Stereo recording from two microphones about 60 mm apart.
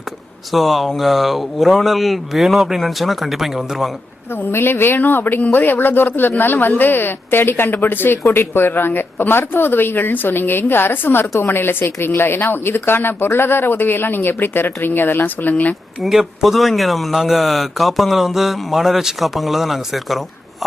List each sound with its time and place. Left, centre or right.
0.5 s speech: centre
4.4 s speech: left
16.0 s speech: centre